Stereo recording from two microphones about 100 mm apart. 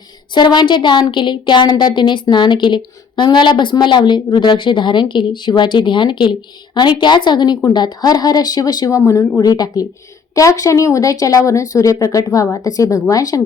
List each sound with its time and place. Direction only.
0.3 s a woman's voice: 50° left (ahead or behind)